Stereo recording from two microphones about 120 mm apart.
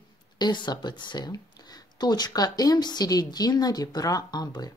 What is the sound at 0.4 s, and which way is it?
Speech, 40° left (ahead or behind).